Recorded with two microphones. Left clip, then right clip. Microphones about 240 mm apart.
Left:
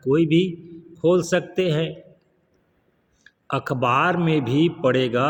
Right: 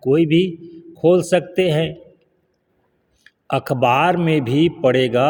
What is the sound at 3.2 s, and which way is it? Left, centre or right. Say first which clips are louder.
A man's voice: right 5 dB; right.